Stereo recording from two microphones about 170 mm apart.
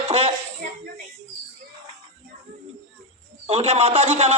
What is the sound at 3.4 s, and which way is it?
Speech, 35° right (ahead or behind).